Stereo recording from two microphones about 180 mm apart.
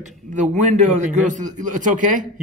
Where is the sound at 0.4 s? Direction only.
40° right (ahead or behind).